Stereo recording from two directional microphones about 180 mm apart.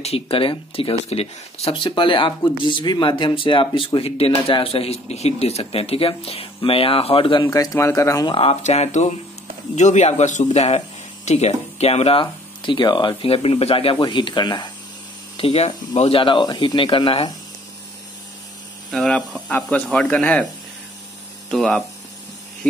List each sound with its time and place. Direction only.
0.0 s speech: 30° left (ahead or behind)
7.4 s speech: 15° left (ahead or behind)
8.4 s speech: 35° left (ahead or behind)
18.9 s speech: 5° left (ahead or behind)
21.5 s speech: centre (ahead or behind)